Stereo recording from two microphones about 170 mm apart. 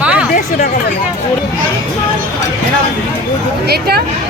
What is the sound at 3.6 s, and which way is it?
Speech, 65° right (ahead or behind).